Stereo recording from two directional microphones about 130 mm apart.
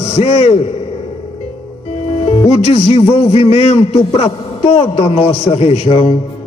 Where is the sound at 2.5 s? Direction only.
50° left (ahead or behind).